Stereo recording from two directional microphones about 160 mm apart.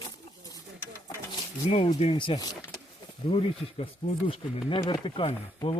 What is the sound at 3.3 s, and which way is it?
Speech, 35° left (ahead or behind).